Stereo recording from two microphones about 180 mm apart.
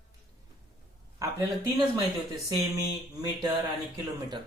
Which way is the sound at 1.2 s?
20° right (ahead or behind).